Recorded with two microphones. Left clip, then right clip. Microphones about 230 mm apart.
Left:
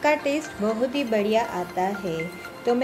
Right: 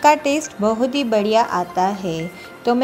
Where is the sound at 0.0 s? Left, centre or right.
Right.